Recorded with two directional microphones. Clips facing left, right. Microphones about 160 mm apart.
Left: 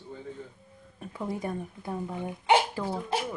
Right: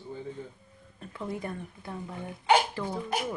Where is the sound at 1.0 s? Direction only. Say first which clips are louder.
Left 2 dB; 15° left (ahead or behind).